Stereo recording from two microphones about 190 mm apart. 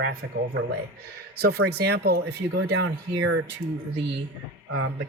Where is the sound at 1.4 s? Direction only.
60° right (ahead or behind).